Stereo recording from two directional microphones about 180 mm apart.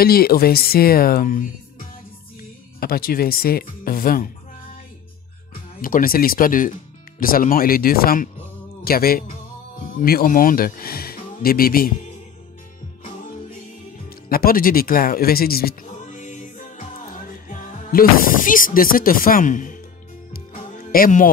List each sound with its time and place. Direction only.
0.0 s speech: 55° left (ahead or behind)
2.8 s speech: 55° left (ahead or behind)
5.8 s speech: 50° left (ahead or behind)
14.0 s music: 55° left (ahead or behind)
17.3 s speech: 45° left (ahead or behind)
20.3 s music: 55° left (ahead or behind)